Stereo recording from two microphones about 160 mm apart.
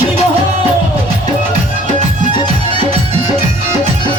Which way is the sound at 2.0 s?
35° right (ahead or behind).